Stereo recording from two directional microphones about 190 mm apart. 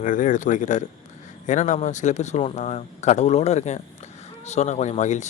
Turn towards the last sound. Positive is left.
turn(degrees=40)  # may be behind; listen again after turning